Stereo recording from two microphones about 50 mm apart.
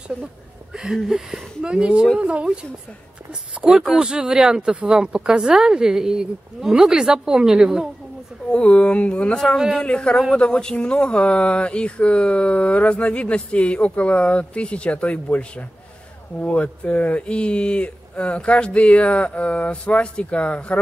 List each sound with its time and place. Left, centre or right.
1.0 s speech: centre
3.9 s speech: centre
8.5 s speech: left